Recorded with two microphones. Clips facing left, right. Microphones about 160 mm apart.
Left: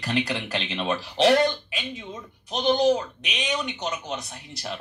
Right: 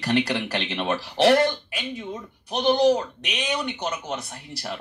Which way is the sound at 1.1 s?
20° left (ahead or behind).